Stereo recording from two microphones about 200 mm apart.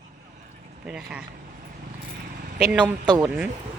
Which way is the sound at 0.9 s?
5° right (ahead or behind).